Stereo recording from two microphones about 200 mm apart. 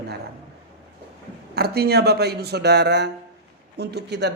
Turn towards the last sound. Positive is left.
turn(degrees=-60)  # may be behind; listen again after turning